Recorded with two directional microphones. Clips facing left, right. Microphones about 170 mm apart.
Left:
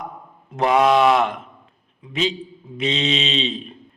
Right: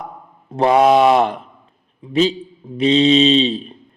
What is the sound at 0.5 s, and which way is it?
A man's voice, 35° right (ahead or behind).